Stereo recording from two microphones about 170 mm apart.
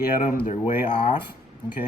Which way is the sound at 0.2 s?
50° left (ahead or behind).